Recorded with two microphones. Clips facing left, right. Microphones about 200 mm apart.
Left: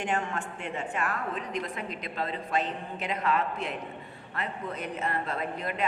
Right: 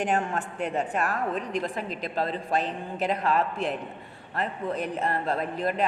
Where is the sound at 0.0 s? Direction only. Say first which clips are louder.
Right 4 dB; 40° right (ahead or behind).